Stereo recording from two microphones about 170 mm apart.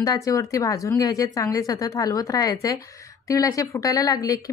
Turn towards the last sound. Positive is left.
turn(degrees=20)  # may be behind; listen again after turning